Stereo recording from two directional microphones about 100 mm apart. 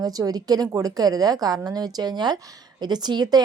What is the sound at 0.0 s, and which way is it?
A woman's voice, 40° right (ahead or behind).